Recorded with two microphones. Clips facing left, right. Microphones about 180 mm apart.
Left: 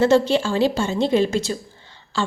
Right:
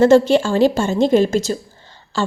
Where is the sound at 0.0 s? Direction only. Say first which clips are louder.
Right 5 dB; 50° right (ahead or behind).